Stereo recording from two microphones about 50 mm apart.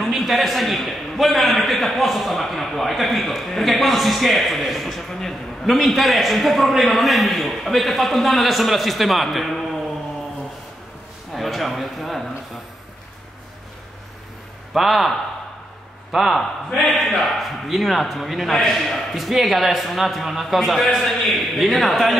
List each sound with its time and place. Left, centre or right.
0.0 s a man's voice: centre
11.3 s speech: centre
14.7 s a man's voice: centre